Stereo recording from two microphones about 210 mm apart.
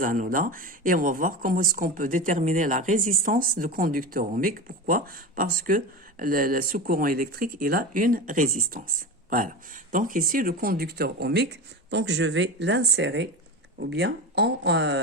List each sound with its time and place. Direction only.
0.0 s speech: 40° right (ahead or behind)
9.9 s speech: 40° right (ahead or behind); by 15.0 s 55° right (ahead or behind)